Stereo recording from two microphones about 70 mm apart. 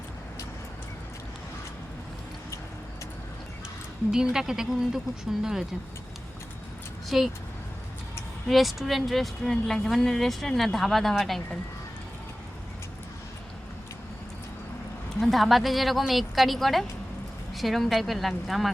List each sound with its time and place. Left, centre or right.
4.1 s a woman's voice: centre
7.1 s speech: centre
8.4 s speech: centre
15.2 s speech: centre